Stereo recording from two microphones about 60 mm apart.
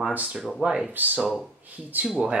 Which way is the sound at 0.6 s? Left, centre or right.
Centre.